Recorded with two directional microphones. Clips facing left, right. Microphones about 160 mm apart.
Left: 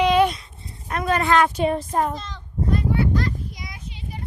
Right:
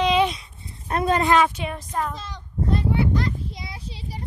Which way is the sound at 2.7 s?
25° right (ahead or behind).